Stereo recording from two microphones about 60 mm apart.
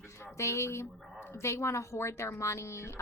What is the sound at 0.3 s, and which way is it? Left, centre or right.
Speech, left.